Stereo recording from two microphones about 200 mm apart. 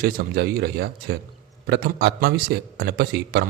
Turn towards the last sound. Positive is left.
turn(degrees=-50)  # may be behind; listen again after turning